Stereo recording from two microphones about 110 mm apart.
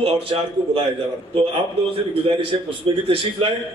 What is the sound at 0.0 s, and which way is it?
Speech, 55° right (ahead or behind).